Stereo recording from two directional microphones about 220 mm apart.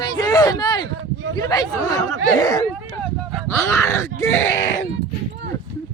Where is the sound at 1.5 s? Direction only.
15° left (ahead or behind).